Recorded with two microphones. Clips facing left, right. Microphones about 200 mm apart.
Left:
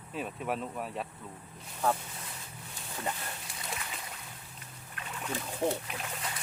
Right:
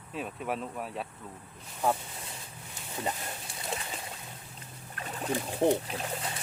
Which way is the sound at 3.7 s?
30° right (ahead or behind).